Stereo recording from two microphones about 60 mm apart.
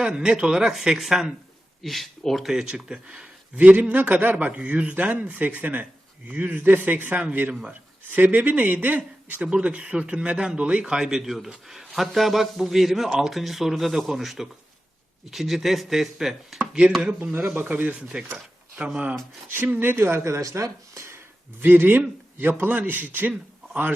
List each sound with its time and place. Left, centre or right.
0.0 s a man's voice: centre
2.5 s a man's voice: centre
17.3 s a man's voice: right
18.1 s speech: centre
19.6 s speech: right
21.6 s a man's voice: right